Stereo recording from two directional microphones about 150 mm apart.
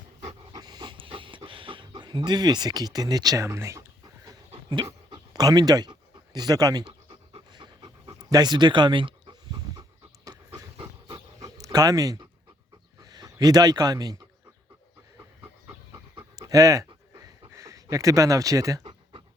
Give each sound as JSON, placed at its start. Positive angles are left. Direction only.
{"t": 0.5, "sound": "pant", "side_deg": -25}
{"t": 5.1, "sound": "speech", "side_deg": -25}
{"t": 7.3, "sound": "pant", "side_deg": -35}
{"t": 13.0, "sound": "speech", "side_deg": -25}
{"t": 16.1, "sound": "pant", "side_deg": -20}